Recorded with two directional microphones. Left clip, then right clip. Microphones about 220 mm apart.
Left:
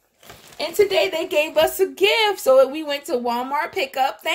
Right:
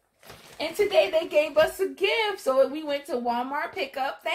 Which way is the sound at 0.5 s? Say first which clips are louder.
Left 4 dB; 55° left (ahead or behind).